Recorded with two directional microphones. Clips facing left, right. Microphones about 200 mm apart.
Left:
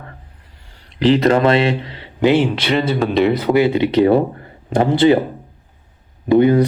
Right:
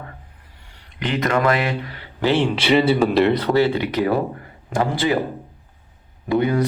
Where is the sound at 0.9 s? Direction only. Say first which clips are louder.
Left 8 dB; 30° left (ahead or behind).